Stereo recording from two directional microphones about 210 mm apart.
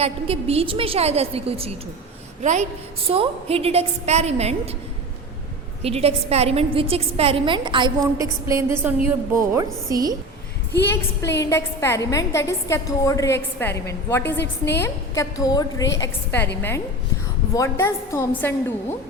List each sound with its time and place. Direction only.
0.0 s a woman's voice: 30° right (ahead or behind)
5.8 s a woman's voice: 30° right (ahead or behind)
11.3 s a woman's voice: 15° left (ahead or behind)
14.3 s a woman's voice: 55° left (ahead or behind)
14.8 s a woman's voice: 15° left (ahead or behind)
17.5 s a woman's voice: 15° left (ahead or behind)